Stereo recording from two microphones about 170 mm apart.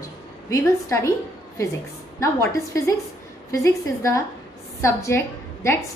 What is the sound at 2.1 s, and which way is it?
A woman's voice, 20° left (ahead or behind).